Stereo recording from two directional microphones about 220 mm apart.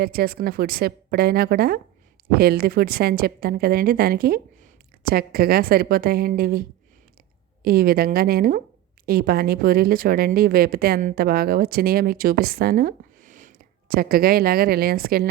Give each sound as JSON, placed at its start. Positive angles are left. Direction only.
{"t": 0.0, "sound": "speech", "side_deg": -45}